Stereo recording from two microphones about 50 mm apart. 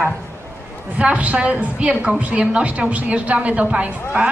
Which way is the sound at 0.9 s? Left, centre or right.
Right.